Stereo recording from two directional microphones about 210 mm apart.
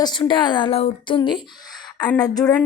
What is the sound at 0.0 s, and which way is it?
A woman's voice, 20° left (ahead or behind).